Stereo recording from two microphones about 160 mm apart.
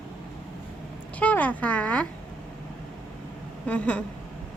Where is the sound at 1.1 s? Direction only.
10° left (ahead or behind).